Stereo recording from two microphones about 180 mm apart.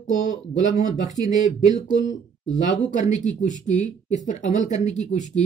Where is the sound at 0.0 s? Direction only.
45° left (ahead or behind).